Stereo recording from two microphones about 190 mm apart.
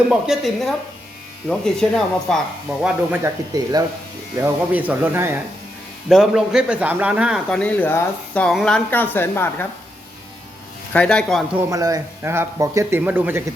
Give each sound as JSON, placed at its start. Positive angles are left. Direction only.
{"t": 0.1, "sound": "speech", "side_deg": 0}
{"t": 3.5, "sound": "speech", "side_deg": -20}
{"t": 4.4, "sound": "speech", "side_deg": -10}
{"t": 10.9, "sound": "speech", "side_deg": 5}
{"t": 11.7, "sound": "speech", "side_deg": -20}